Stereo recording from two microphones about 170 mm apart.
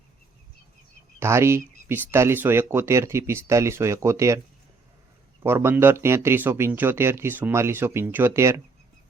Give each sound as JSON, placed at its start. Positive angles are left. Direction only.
{"t": 1.2, "sound": "speech", "side_deg": -15}
{"t": 5.4, "sound": "speech", "side_deg": -15}